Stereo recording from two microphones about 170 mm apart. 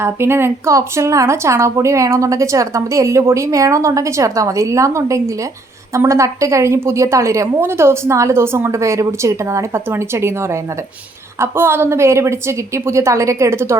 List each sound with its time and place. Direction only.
0.0 s speech: 15° right (ahead or behind)